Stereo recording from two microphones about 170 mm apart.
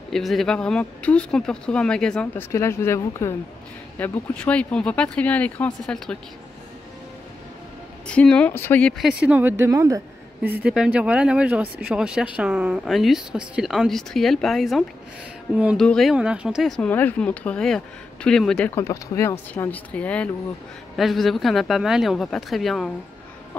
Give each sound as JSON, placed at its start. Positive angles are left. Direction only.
{"t": 0.1, "sound": "speech", "side_deg": 0}
{"t": 2.5, "sound": "speech", "side_deg": 15}
{"t": 8.1, "sound": "speech", "side_deg": 5}
{"t": 15.8, "sound": "speech", "side_deg": 0}
{"t": 18.8, "sound": "speech", "side_deg": 15}